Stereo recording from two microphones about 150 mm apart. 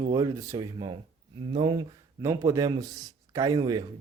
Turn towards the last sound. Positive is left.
turn(degrees=-25)  # may be behind; listen again after turning